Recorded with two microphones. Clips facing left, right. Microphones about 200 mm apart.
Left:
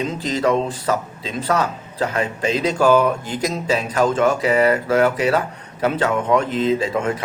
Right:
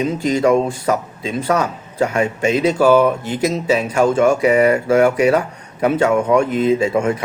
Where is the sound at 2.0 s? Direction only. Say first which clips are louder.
Right 3 dB; 35° left (ahead or behind).